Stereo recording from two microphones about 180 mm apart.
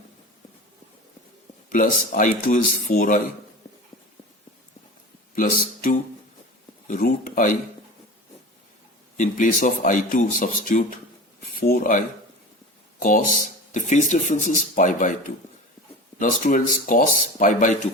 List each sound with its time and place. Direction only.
1.7 s speech: 45° left (ahead or behind)
5.3 s speech: 50° left (ahead or behind)
9.1 s speech: 45° left (ahead or behind)
16.1 s speech: 45° left (ahead or behind)